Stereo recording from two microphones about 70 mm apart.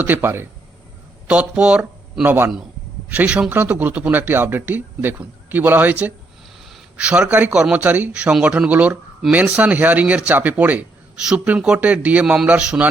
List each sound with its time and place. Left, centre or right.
0.0 s speech: right
1.3 s speech: centre
2.2 s a man's voice: right
3.2 s a man's voice: centre
3.5 s a man's voice: right
12.2 s a man's voice: centre